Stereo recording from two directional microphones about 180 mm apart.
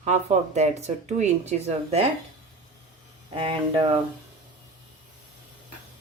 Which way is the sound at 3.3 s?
30° right (ahead or behind).